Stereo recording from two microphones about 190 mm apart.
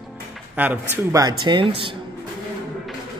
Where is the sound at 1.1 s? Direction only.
20° right (ahead or behind).